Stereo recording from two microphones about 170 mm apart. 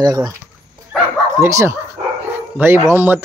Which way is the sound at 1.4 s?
15° right (ahead or behind).